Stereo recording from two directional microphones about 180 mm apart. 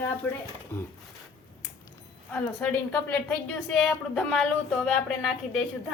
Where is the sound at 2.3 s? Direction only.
10° left (ahead or behind).